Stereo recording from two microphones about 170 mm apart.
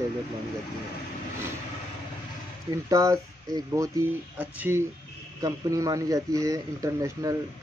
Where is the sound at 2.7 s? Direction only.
20° right (ahead or behind).